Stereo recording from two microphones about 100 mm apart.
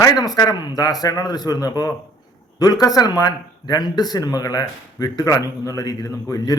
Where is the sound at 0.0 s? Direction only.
40° left (ahead or behind).